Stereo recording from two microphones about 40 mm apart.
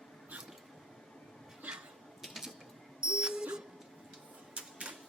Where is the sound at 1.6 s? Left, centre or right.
Right.